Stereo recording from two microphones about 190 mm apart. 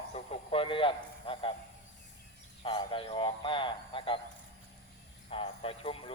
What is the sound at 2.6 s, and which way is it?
Speech, 30° left (ahead or behind).